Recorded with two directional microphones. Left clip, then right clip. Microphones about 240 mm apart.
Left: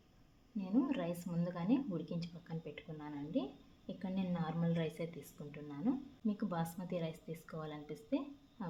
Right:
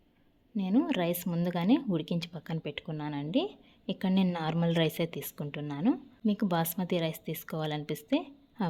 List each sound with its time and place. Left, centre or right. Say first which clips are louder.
0.5 s a woman's voice: right 8 dB; right